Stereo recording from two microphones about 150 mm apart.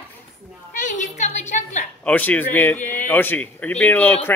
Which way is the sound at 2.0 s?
10° left (ahead or behind).